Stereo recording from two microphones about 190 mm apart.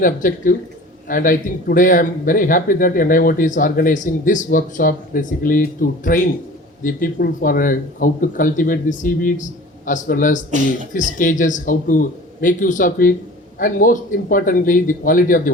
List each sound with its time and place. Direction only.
0.0 s speech: 45° left (ahead or behind)
10.5 s speech: 40° right (ahead or behind)
10.9 s speech: 40° left (ahead or behind)